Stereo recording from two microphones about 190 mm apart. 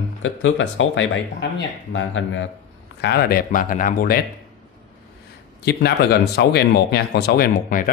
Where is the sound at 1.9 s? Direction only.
90° left.